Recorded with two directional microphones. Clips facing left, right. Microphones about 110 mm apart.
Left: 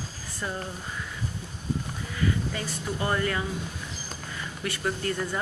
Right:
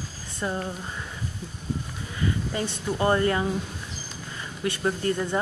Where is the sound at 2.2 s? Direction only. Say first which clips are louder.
Right 1 dB; 25° right (ahead or behind).